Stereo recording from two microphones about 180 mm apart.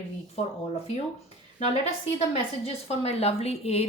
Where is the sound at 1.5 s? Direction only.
35° left (ahead or behind).